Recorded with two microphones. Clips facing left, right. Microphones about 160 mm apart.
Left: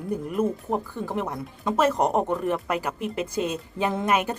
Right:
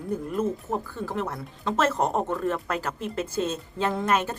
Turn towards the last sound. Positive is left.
turn(degrees=15)  # may be behind; listen again after turning